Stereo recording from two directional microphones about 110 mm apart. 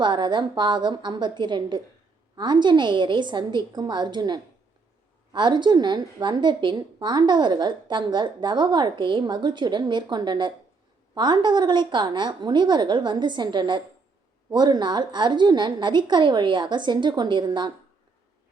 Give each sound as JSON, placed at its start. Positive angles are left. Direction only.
{"t": 0.0, "sound": "a woman's voice", "side_deg": -45}